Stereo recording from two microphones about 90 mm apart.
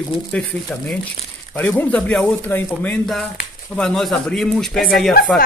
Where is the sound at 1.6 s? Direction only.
20° left (ahead or behind).